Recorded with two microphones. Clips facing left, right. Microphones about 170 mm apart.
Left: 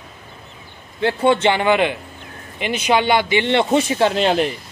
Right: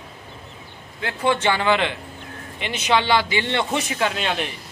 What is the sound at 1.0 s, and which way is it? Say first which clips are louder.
Speech: left 5 dB; 25° left (ahead or behind).